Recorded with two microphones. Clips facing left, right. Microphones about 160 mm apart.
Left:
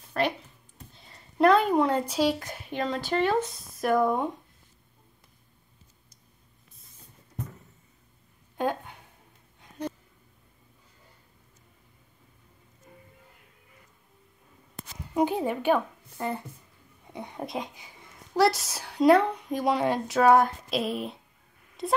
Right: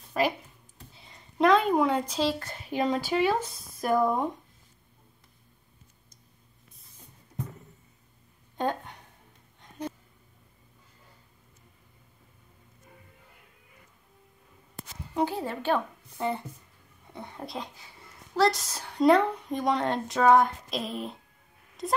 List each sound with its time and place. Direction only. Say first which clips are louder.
0.2 s speech: right 1 dB; 5° right (ahead or behind)
0.9 s a sound: left 2 dB; centre (ahead or behind)
2.0 s speech: left 3 dB; 10° left (ahead or behind)
2.7 s speech: right 2 dB; 5° right (ahead or behind)
8.5 s a sound: left 1 dB; 5° left (ahead or behind)
15.1 s speech: left 3 dB; 15° left (ahead or behind)
16.2 s speech: right 1 dB; 5° left (ahead or behind)
17.1 s speech: left 4 dB; 15° left (ahead or behind); by 21.2 s centre (ahead or behind)